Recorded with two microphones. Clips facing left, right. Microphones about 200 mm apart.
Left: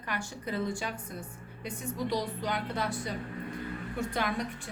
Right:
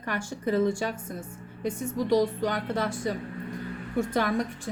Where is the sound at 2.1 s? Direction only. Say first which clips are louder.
Right 9 dB; 45° right (ahead or behind).